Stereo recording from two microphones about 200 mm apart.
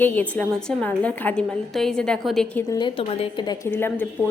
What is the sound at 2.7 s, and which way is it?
Speech, 25° left (ahead or behind).